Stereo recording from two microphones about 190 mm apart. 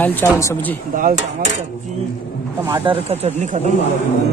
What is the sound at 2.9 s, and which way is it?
Speech, 35° right (ahead or behind).